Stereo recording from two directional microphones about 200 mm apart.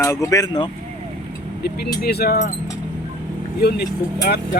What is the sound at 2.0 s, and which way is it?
Speech, 50° left (ahead or behind).